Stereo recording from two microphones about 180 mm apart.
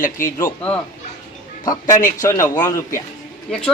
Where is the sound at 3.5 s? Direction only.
5° left (ahead or behind).